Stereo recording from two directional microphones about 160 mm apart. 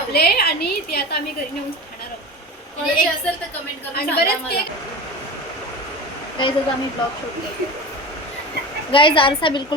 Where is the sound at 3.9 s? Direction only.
75° left (ahead or behind).